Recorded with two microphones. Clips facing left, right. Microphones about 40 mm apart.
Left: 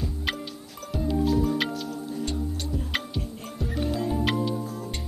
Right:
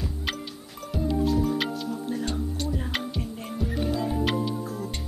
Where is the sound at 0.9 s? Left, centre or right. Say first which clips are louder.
Even; centre.